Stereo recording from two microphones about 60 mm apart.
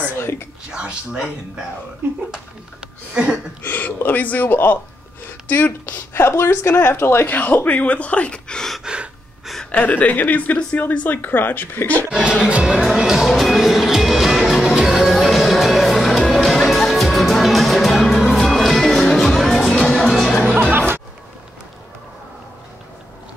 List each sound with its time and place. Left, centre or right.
0.2 s whispering: left
0.7 s speech: centre
2.3 s speech: centre
3.6 s a woman's voice: left; by 8.7 s centre
8.8 s gasp: centre
9.7 s a woman's voice: left
12.1 s speech: centre
12.6 s speech: centre
13.3 s music: centre